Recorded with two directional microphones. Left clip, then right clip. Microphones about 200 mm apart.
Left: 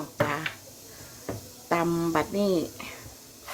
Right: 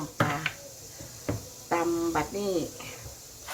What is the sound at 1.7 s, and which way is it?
Speech, 50° left (ahead or behind).